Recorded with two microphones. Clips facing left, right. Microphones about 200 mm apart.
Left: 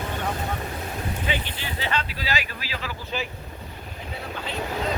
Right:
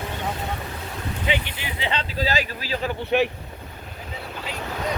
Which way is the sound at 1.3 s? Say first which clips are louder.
Right 3 dB; 20° right (ahead or behind).